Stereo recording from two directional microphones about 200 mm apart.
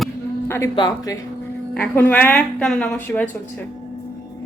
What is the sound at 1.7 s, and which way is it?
A woman's voice, 5° left (ahead or behind).